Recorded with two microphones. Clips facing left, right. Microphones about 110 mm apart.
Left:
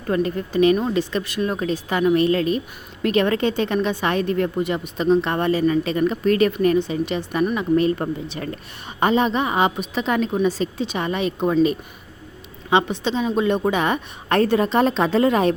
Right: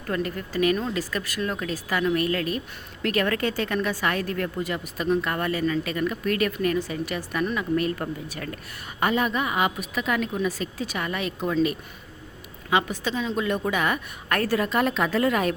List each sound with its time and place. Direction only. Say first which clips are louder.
0.1 s a woman's voice: left 6 dB; 25° left (ahead or behind)
12.7 s a woman's voice: left 5 dB; 25° left (ahead or behind)